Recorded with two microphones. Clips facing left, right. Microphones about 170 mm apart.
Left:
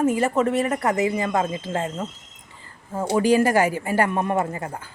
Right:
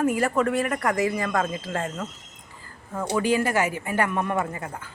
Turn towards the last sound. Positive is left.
turn(degrees=30)  # may be behind; listen again after turning